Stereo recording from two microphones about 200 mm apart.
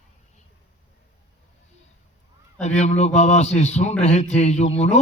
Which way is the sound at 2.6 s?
35° left (ahead or behind).